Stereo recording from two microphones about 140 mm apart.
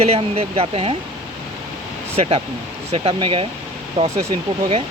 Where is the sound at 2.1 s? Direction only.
45° right (ahead or behind).